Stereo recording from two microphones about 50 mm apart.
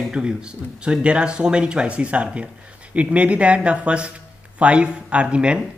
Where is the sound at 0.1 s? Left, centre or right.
Centre.